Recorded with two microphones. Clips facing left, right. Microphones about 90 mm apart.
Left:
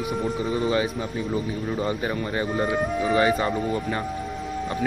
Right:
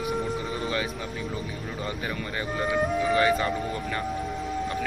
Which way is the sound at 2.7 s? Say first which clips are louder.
Left 1 dB; centre (ahead or behind).